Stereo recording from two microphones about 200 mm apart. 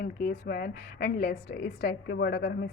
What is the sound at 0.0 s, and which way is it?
A woman's voice, 45° left (ahead or behind).